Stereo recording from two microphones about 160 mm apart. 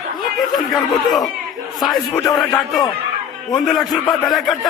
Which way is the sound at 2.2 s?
20° left (ahead or behind).